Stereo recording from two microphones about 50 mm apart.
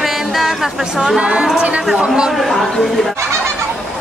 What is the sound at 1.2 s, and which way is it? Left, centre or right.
Speech, right.